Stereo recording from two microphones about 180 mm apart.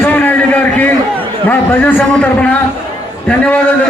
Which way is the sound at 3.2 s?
5° left (ahead or behind).